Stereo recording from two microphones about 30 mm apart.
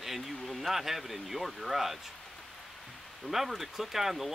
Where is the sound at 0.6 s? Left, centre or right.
Centre.